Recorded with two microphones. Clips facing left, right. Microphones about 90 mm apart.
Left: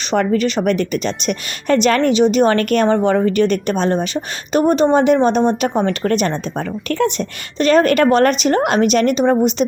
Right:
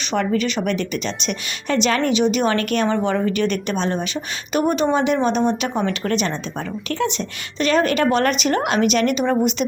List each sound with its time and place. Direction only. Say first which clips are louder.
0.1 s a woman's voice: left 4 dB; 45° left (ahead or behind)